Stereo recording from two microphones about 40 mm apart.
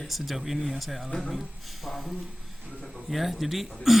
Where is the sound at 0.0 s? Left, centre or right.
Centre.